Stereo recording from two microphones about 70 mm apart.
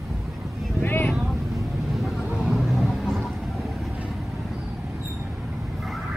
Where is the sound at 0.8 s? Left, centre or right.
Left.